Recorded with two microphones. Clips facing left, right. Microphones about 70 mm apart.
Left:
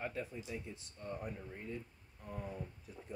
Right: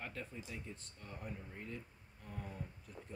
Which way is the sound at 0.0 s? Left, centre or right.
Centre.